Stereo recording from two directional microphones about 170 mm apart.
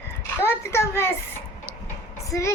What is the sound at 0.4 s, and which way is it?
Speech, 15° left (ahead or behind).